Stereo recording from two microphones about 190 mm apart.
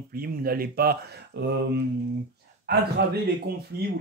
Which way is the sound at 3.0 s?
60° right (ahead or behind).